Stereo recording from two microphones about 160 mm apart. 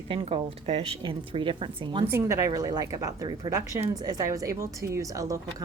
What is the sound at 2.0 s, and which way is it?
A woman's voice, 15° right (ahead or behind).